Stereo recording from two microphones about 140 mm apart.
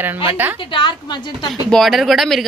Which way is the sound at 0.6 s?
35° left (ahead or behind).